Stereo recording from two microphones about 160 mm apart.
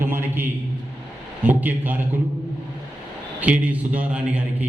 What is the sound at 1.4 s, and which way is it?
Speech, 10° right (ahead or behind).